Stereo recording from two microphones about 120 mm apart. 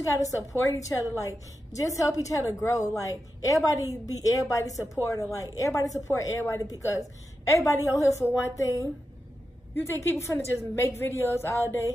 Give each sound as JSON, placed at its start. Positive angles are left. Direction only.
{"t": 0.0, "sound": "a woman's voice", "side_deg": 25}
{"t": 9.8, "sound": "a woman's voice", "side_deg": 20}